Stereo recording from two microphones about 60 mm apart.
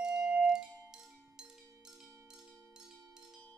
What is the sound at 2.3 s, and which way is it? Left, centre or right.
Tubular bells, centre.